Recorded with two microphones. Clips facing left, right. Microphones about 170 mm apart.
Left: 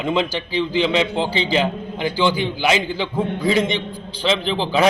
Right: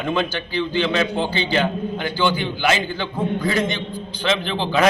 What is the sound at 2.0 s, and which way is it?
A man's voice, 10° left (ahead or behind).